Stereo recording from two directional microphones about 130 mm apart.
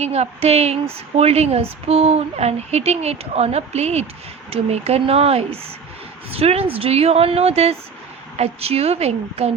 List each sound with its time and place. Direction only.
0.0 s a woman's voice: 55° right (ahead or behind)